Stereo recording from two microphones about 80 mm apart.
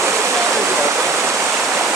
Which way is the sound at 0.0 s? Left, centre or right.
Right.